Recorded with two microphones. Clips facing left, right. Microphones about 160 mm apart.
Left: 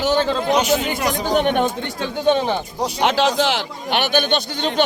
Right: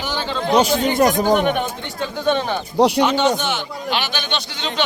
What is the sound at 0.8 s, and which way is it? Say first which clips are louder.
Speech: right 6 dB; 40° right (ahead or behind).